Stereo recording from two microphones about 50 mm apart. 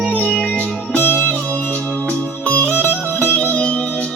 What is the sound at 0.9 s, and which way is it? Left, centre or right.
Music, left.